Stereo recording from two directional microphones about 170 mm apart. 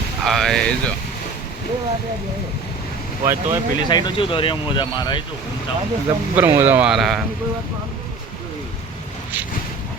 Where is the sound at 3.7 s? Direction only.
25° left (ahead or behind).